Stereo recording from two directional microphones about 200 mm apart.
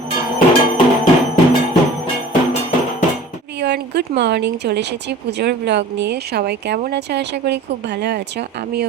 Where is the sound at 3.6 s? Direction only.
60° right (ahead or behind).